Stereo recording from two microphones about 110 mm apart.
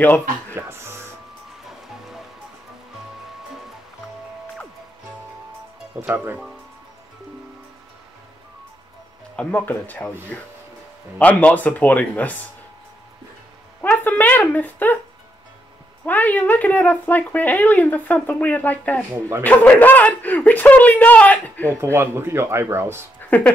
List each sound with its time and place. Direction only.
0.0 s speech: 15° left (ahead or behind)
0.6 s music: 25° right (ahead or behind)
1.6 s music: 5° right (ahead or behind)
5.9 s speech: 25° right (ahead or behind)
9.4 s speech: 15° left (ahead or behind)
11.1 s speech: 15° left (ahead or behind)
13.7 s a woman's voice: 15° left (ahead or behind)
16.1 s speech: 15° left (ahead or behind)
21.9 s speech: 20° right (ahead or behind)
23.3 s speech: 15° left (ahead or behind)